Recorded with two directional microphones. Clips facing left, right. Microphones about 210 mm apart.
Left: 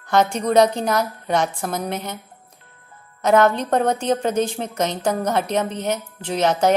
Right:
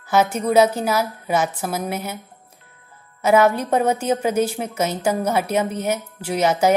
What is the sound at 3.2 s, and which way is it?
A woman's voice, 10° right (ahead or behind).